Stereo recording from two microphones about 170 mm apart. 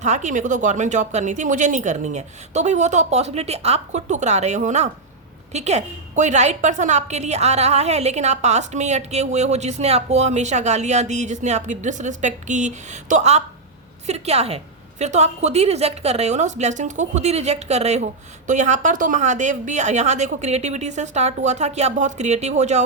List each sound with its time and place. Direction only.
0.0 s a woman's voice: 45° right (ahead or behind)